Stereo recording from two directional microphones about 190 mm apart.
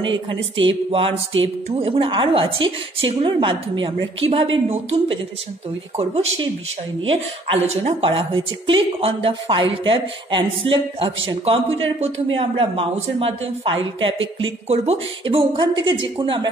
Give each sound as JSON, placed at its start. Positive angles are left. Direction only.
{"t": 0.6, "sound": "a woman's voice", "side_deg": -30}
{"t": 1.3, "sound": "speech", "side_deg": -90}
{"t": 1.7, "sound": "a woman's voice", "side_deg": -30}
{"t": 14.4, "sound": "a woman's voice", "side_deg": -30}